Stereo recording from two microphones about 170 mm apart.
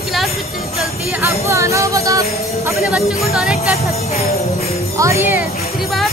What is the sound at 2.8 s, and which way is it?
Speech, 5° right (ahead or behind).